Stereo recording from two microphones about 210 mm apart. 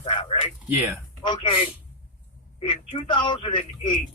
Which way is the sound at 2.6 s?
25° left (ahead or behind).